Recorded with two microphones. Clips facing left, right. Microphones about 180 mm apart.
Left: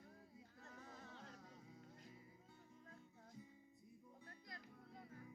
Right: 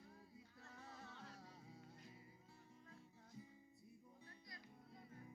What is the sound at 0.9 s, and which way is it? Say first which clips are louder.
Music: even; 45° left (ahead or behind).